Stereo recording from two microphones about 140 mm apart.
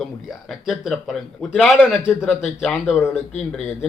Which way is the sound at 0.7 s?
Centre (ahead or behind).